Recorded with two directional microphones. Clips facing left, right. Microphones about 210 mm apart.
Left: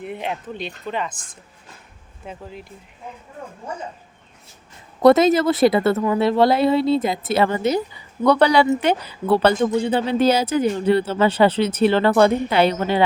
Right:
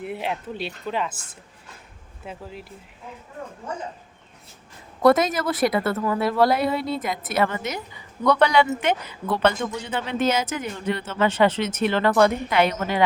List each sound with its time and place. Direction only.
0.0 s speech: 5° right (ahead or behind)
5.0 s speech: 25° left (ahead or behind)